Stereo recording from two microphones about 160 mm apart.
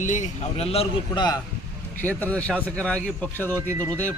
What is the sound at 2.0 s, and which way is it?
Speech, 10° left (ahead or behind).